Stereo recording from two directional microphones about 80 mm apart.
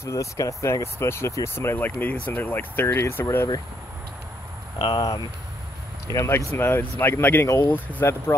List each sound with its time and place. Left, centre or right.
0.0 s speech: left
4.7 s speech: left
6.0 s speech: left
6.5 s speech: left